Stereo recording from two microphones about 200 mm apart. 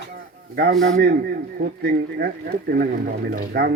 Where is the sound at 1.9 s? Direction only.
50° right (ahead or behind).